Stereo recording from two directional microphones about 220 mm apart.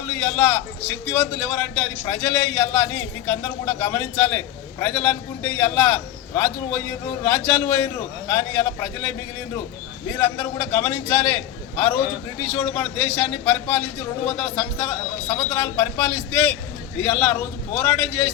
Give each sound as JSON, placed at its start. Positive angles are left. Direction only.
{"t": 1.0, "sound": "a man's voice", "side_deg": 5}